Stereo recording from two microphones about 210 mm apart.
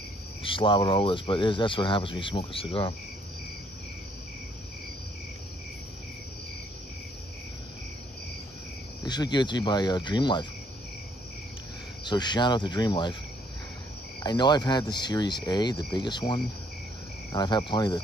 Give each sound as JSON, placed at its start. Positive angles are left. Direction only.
{"t": 0.4, "sound": "speech", "side_deg": 25}
{"t": 9.0, "sound": "speech", "side_deg": 20}
{"t": 12.0, "sound": "speech", "side_deg": 20}
{"t": 14.2, "sound": "speech", "side_deg": 20}